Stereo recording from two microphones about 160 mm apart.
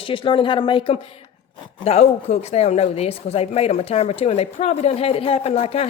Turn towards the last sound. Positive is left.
turn(degrees=40)  # may be behind; listen again after turning